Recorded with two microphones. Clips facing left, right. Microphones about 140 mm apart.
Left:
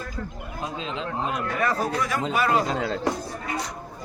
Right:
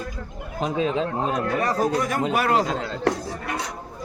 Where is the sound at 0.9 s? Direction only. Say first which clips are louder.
Right 5 dB; 40° right (ahead or behind).